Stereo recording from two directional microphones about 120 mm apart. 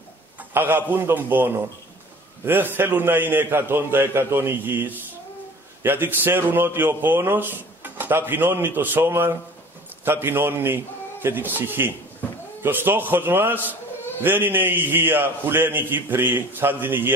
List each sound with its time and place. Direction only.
0.4 s a man's voice: 20° right (ahead or behind)